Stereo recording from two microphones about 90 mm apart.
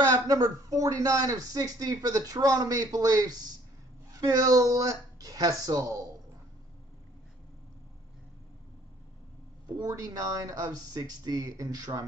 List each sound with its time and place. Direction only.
0.1 s a man's voice: 40° right (ahead or behind)
9.7 s speech: 45° right (ahead or behind)